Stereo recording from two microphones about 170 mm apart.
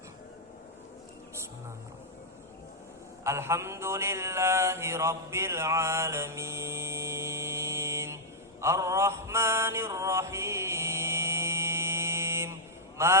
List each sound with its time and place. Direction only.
3.2 s mantra: 15° right (ahead or behind)
13.0 s a man's voice: 15° right (ahead or behind)